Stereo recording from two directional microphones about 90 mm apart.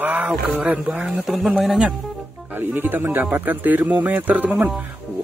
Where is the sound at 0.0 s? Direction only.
15° right (ahead or behind).